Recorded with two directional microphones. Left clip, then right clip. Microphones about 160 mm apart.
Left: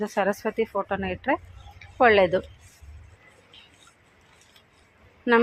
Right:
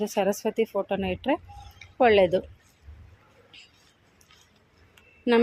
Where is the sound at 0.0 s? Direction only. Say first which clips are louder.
Left 1 dB; 25° right (ahead or behind).